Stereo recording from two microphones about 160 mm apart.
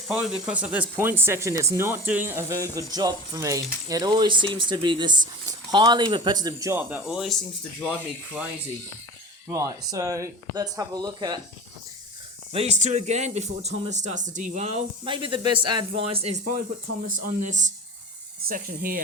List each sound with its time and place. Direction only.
0.1 s speech: 5° right (ahead or behind)
9.5 s speech: 20° right (ahead or behind)
12.5 s speech: 45° right (ahead or behind)
17.1 s speech: 55° right (ahead or behind)
18.4 s speech: 60° right (ahead or behind)